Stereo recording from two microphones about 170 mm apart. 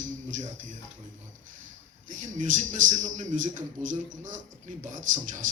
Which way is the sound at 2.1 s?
50° right (ahead or behind).